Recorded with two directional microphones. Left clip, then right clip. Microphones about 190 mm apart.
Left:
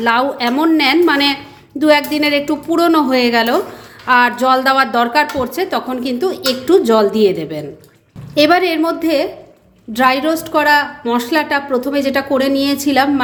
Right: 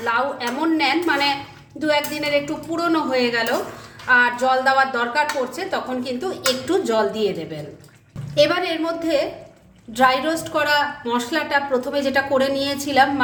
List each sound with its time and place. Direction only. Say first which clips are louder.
0.0 s a woman's voice: left 7 dB; 50° left (ahead or behind); by 13.1 s 35° left (ahead or behind)